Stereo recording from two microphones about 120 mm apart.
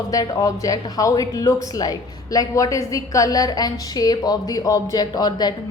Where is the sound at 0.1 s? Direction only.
30° left (ahead or behind).